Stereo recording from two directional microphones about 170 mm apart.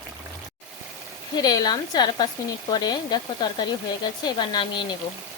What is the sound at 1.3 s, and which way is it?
Speech, 25° left (ahead or behind).